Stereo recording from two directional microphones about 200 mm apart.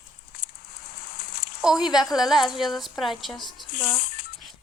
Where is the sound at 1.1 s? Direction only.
50° left (ahead or behind).